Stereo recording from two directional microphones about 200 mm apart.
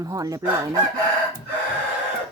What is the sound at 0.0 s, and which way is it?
Chicken, 15° right (ahead or behind).